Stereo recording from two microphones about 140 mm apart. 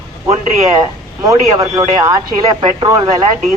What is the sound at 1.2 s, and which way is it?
Speech, 25° right (ahead or behind).